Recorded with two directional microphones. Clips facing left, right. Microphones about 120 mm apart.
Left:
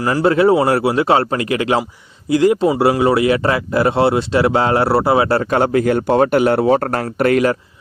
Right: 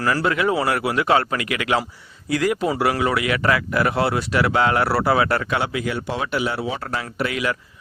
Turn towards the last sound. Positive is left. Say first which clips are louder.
# left 10 dB
turn(degrees=50)  # may be behind; listen again after turning